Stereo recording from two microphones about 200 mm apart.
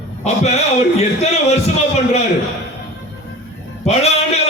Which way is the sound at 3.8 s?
30° left (ahead or behind).